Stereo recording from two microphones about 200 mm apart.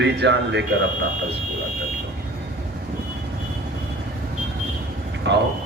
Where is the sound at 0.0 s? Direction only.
60° right (ahead or behind).